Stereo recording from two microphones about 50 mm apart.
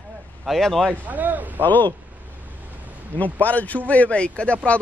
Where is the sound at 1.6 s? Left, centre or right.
Left.